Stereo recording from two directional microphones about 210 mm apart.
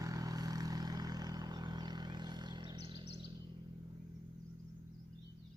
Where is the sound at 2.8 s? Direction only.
55° left (ahead or behind).